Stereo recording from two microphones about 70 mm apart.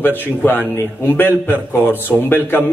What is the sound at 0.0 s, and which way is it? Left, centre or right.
Speech, left.